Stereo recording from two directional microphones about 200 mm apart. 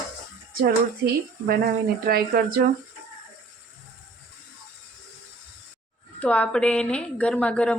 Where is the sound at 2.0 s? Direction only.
45° right (ahead or behind).